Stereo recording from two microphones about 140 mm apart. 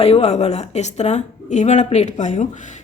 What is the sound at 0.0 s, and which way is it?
Speech, 45° left (ahead or behind).